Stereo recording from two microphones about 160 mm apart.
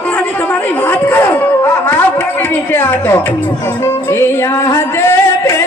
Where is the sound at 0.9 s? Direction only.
15° left (ahead or behind).